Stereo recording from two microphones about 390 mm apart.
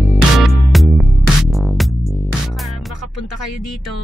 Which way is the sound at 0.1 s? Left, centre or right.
Centre.